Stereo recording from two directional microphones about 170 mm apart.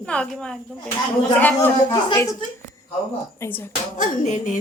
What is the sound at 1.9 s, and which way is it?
Speech, 20° left (ahead or behind).